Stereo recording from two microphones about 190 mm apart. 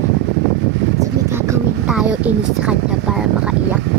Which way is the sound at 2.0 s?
5° right (ahead or behind).